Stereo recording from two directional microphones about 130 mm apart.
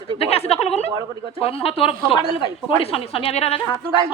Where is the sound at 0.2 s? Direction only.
55° left (ahead or behind).